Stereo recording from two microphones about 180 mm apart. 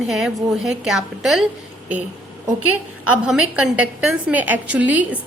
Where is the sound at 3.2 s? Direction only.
5° right (ahead or behind).